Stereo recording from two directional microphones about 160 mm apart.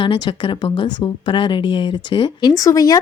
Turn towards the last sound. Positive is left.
turn(degrees=20)  # may be behind; listen again after turning